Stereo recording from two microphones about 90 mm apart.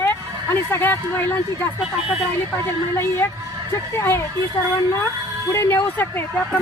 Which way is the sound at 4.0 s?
25° left (ahead or behind).